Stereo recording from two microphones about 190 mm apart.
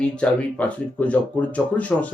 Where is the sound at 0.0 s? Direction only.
5° left (ahead or behind).